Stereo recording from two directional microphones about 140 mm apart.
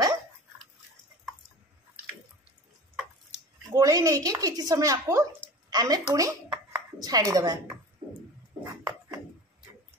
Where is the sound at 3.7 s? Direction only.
25° right (ahead or behind).